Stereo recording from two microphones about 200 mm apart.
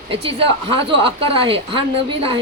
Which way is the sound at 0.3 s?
25° right (ahead or behind).